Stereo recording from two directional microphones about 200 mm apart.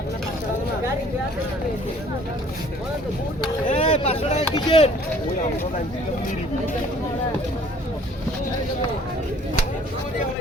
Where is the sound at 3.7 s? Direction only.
35° left (ahead or behind).